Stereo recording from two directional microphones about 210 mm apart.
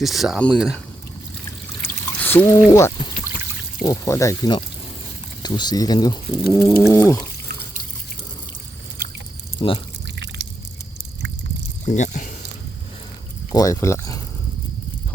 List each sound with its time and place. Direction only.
0.0 s speech: centre (ahead or behind)
1.8 s a sound: 10° left (ahead or behind)
3.8 s speech: 15° left (ahead or behind)
9.6 s speech: 25° left (ahead or behind)
11.9 s speech: 35° left (ahead or behind)
13.5 s speech: 15° left (ahead or behind)